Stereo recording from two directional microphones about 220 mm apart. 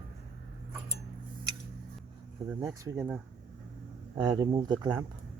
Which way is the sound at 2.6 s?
10° right (ahead or behind).